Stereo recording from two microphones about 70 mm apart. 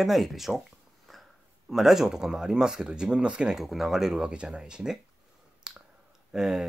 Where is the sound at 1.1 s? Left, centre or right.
Centre.